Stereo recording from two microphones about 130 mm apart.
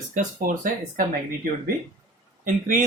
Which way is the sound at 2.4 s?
80° right.